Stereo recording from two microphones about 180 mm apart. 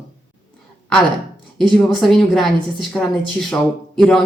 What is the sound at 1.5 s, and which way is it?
A woman's voice, centre (ahead or behind).